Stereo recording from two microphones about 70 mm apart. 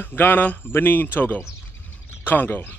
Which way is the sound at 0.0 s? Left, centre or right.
Left.